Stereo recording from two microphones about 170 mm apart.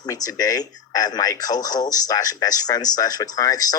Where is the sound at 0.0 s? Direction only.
20° left (ahead or behind).